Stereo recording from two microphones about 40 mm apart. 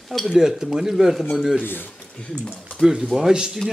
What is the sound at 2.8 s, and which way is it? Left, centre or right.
Speech, centre.